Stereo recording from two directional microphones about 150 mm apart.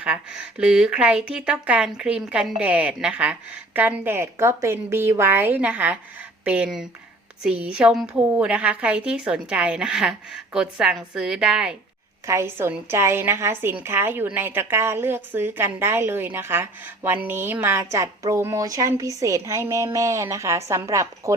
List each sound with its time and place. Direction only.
0.0 s a woman's voice: 5° right (ahead or behind)
12.2 s a woman's voice: 20° right (ahead or behind)